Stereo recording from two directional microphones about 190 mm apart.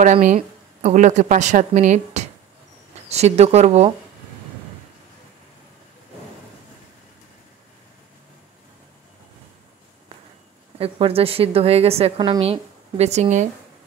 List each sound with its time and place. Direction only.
0.0 s a woman's voice: 40° right (ahead or behind)
10.8 s a woman's voice: 30° right (ahead or behind)